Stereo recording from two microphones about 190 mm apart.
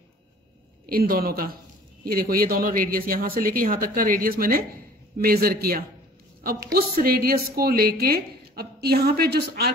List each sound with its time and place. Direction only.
0.8 s a woman's voice: 50° right (ahead or behind)